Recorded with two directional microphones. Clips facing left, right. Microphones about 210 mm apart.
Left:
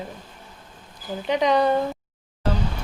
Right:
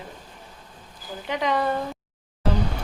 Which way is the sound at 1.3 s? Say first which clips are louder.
Left 5 dB; 20° left (ahead or behind).